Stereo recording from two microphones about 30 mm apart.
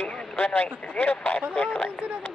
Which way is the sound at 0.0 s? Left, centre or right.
Left.